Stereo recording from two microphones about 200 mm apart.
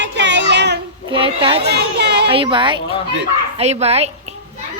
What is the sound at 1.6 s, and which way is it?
Children playing, 55° right (ahead or behind).